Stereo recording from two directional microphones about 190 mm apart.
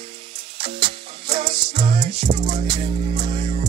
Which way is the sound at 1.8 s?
25° right (ahead or behind).